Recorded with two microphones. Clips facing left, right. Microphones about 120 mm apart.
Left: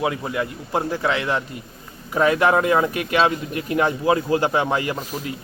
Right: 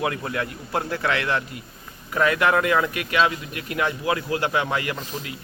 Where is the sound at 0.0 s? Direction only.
15° left (ahead or behind).